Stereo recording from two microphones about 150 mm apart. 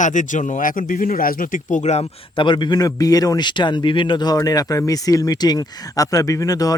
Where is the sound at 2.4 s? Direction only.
30° left (ahead or behind).